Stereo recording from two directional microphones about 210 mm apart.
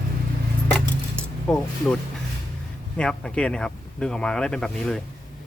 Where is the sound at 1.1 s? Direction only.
5° left (ahead or behind).